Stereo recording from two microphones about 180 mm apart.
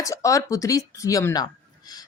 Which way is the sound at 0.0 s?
15° left (ahead or behind).